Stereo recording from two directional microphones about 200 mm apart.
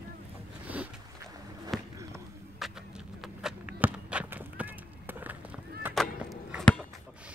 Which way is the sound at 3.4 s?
5° right (ahead or behind).